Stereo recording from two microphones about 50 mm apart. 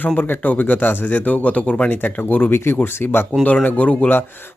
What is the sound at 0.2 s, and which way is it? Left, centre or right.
Speech, left.